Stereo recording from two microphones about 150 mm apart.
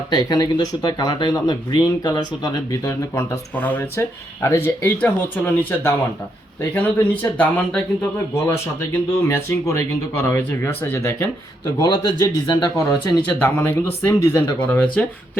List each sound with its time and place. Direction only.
0.1 s speech: 30° left (ahead or behind)
3.5 s speech: 15° left (ahead or behind); by 13.0 s 30° left (ahead or behind)
13.4 s speech: 15° left (ahead or behind)